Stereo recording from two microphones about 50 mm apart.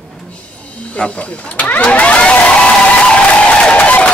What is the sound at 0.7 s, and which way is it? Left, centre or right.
Speech, left.